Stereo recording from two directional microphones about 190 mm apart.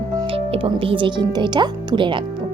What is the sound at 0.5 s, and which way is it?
A woman's voice, 30° right (ahead or behind).